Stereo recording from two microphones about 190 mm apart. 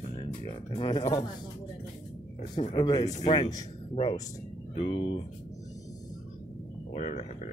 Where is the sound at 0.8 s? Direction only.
25° left (ahead or behind).